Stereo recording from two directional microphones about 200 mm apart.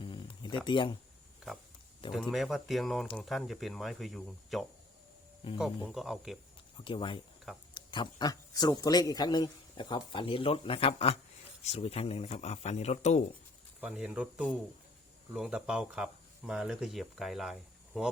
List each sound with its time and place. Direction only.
0.0 s a sound: 25° left (ahead or behind)
2.3 s speech: centre (ahead or behind)
6.8 s a man's voice: 25° left (ahead or behind)
13.8 s speech: 5° right (ahead or behind)